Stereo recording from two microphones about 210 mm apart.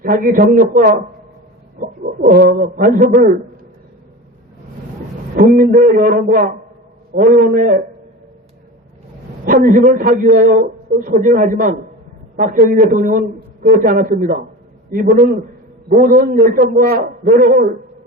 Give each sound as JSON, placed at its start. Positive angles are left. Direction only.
{"t": 0.0, "sound": "a man's voice", "side_deg": -40}
{"t": 1.8, "sound": "bird", "side_deg": -40}
{"t": 2.2, "sound": "a man's voice", "side_deg": -50}
{"t": 5.4, "sound": "a man's voice", "side_deg": -40}
{"t": 9.5, "sound": "a man's voice", "side_deg": -45}